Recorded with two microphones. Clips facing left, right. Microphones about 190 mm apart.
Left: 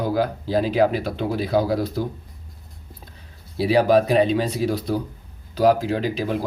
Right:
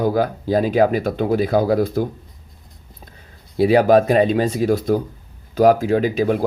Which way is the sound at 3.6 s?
50° right (ahead or behind).